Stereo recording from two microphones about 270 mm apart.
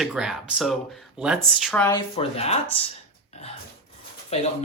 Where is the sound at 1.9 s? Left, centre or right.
Left.